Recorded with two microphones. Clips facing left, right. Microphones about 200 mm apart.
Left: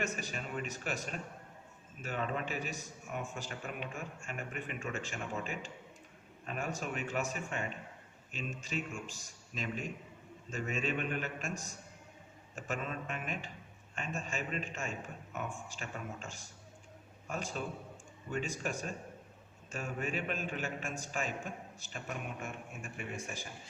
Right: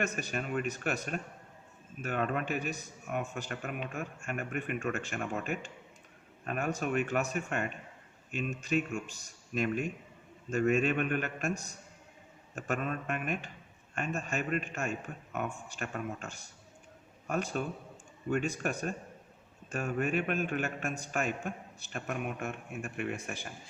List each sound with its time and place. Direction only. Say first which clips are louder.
0.0 s a man's voice: right 4 dB; 60° right (ahead or behind)
12.5 s a man's voice: right 5 dB; 60° right (ahead or behind)